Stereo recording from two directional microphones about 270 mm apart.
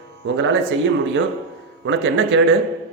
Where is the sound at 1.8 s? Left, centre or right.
Right.